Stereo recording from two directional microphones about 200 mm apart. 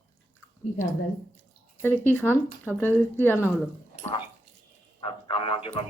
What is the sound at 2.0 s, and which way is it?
Speech, 10° left (ahead or behind).